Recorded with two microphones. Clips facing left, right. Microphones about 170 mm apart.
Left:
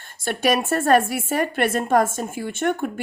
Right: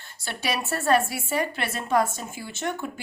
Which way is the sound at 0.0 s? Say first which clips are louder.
Left 9 dB; 50° left (ahead or behind).